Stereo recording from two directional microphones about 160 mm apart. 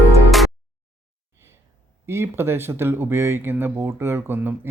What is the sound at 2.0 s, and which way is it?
Speech, 15° right (ahead or behind).